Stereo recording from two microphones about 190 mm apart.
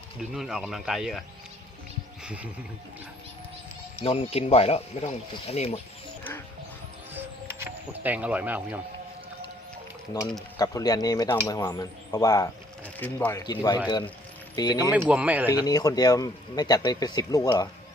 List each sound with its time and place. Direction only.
0.3 s speech: 5° right (ahead or behind)
2.2 s speech: 5° right (ahead or behind)
4.0 s speech: 30° left (ahead or behind)
8.0 s speech: 10° right (ahead or behind)
10.6 s speech: 20° left (ahead or behind)
14.8 s speech: 10° right (ahead or behind)
15.6 s speech: 20° left (ahead or behind)